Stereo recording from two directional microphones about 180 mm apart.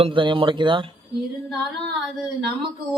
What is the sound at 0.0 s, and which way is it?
Speech, 25° right (ahead or behind).